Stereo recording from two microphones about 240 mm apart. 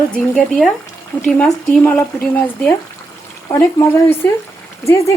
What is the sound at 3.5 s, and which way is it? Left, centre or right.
Speech, centre.